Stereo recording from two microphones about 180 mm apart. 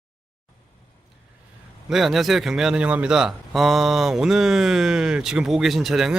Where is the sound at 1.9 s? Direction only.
Centre (ahead or behind).